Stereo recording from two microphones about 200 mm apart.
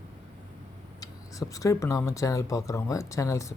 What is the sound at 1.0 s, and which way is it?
Speech, 15° left (ahead or behind).